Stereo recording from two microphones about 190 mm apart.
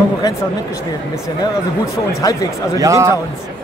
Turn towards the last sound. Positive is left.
turn(degrees=-15)  # may be behind; listen again after turning